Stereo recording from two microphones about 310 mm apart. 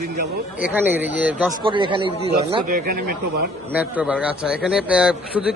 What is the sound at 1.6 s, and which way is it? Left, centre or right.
Speech, centre.